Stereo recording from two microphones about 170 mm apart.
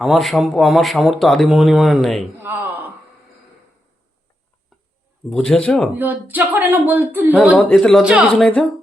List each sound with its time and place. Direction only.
0.0 s speech: centre (ahead or behind)
2.4 s a man's voice: 10° right (ahead or behind)
5.3 s speech: 5° left (ahead or behind)
6.0 s speech: 10° right (ahead or behind); by 8.7 s 5° left (ahead or behind)